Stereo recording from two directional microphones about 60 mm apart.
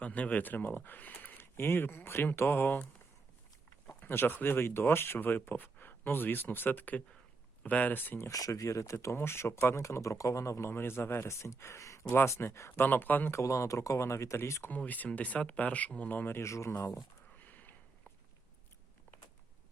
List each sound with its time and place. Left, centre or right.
0.0 s speech: left
4.0 s speech: left
8.3 s speech: left
9.1 s speech: left
11.3 s speech: left
13.3 s speech: left
14.7 s speech: left
16.4 s speech: left
17.3 s a sound: left